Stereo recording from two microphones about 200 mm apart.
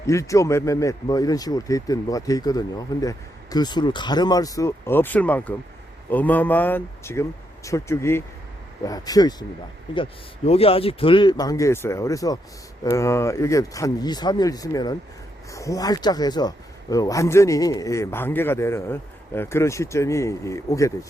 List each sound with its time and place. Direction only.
0.1 s speech: 15° left (ahead or behind)